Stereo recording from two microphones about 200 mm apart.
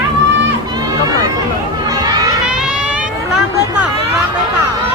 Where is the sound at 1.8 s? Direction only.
20° right (ahead or behind).